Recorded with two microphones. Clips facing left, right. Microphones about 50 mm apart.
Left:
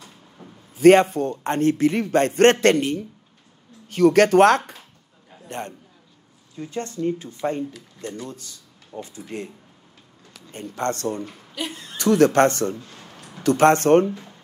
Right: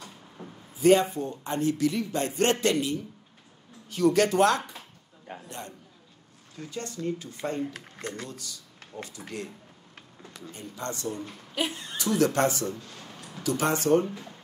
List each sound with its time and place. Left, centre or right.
0.4 s a sound: centre
0.7 s a man's voice: left
5.3 s a sound: right
6.5 s speech: left
7.6 s speech: right
8.9 s speech: left
10.5 s speech: left
11.5 s speech: centre
12.0 s speech: left
12.7 s speech: centre
13.1 s a sound: centre
13.4 s speech: left
14.0 s speech: centre